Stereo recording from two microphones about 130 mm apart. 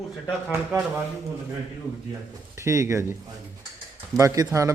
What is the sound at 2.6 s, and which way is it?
Speech, 20° right (ahead or behind).